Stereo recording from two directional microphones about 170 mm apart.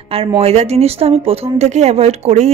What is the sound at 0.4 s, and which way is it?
Speech, 40° right (ahead or behind).